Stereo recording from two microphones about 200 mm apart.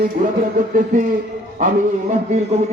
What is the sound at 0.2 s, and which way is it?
Speech, 40° right (ahead or behind).